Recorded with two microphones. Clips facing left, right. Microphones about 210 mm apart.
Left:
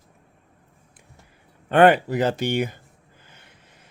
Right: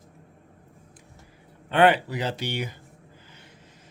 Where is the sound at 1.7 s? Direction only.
45° left (ahead or behind).